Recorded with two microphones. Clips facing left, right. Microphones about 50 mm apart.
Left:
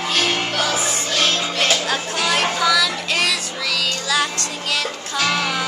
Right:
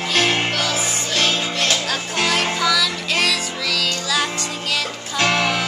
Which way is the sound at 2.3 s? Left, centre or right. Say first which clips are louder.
Left 2 dB; centre.